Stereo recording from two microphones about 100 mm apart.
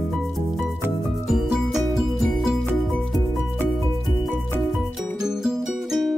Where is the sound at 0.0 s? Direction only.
Centre (ahead or behind).